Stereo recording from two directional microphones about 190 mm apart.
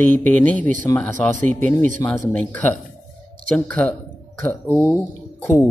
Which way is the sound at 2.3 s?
5° left (ahead or behind).